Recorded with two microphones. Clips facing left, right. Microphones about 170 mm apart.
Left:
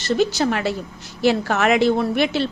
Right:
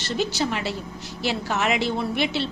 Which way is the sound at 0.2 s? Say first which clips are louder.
Left 3 dB; 50° left (ahead or behind).